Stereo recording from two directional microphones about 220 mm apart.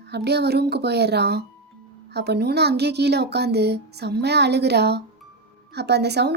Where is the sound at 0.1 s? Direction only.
50° right (ahead or behind).